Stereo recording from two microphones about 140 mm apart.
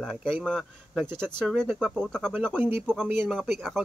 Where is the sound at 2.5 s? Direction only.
15° right (ahead or behind).